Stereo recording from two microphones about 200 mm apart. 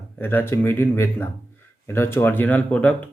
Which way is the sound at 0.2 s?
10° left (ahead or behind).